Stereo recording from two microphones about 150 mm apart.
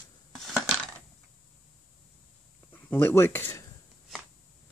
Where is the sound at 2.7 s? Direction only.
15° left (ahead or behind).